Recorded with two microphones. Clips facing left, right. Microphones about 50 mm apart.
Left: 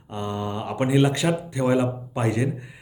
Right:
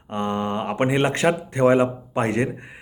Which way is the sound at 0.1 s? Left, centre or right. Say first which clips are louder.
Right 4 dB; right.